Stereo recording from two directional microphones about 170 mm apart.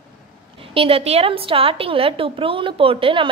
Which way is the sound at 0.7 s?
35° right (ahead or behind).